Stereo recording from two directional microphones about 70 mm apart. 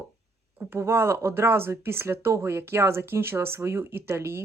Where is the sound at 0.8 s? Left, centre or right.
Right.